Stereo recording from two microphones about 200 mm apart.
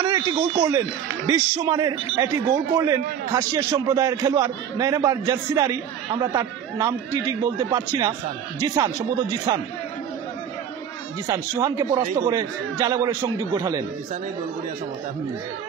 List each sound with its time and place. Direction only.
0.0 s a man's voice: 25° right (ahead or behind)
11.2 s a man's voice: 15° right (ahead or behind)